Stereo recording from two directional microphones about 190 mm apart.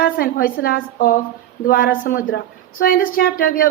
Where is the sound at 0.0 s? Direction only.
50° left (ahead or behind).